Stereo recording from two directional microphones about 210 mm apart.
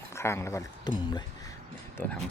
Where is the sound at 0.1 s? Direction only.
15° left (ahead or behind).